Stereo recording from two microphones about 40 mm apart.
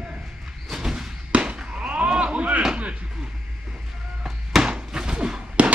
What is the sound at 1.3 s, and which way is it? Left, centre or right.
Fireworks, right.